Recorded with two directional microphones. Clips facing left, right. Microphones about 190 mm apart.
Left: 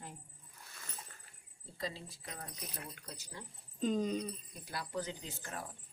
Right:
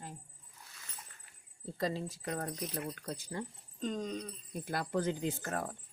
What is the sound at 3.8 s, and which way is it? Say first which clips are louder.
Speech: left 3 dB; 5° left (ahead or behind).